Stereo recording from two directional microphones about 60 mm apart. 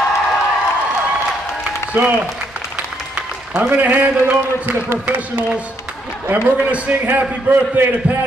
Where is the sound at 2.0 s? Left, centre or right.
Right.